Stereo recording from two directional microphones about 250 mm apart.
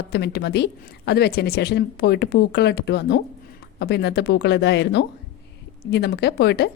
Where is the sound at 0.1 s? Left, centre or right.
Left.